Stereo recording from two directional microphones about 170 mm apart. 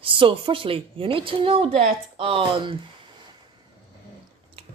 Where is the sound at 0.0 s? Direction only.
30° right (ahead or behind).